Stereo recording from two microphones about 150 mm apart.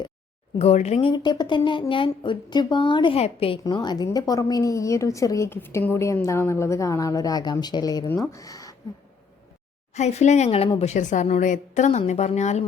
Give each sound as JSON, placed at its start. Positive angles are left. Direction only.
{"t": 0.6, "sound": "speech", "side_deg": 45}
{"t": 1.1, "sound": "a woman's voice", "side_deg": 30}
{"t": 3.6, "sound": "a woman's voice", "side_deg": 30}
{"t": 9.9, "sound": "speech", "side_deg": 50}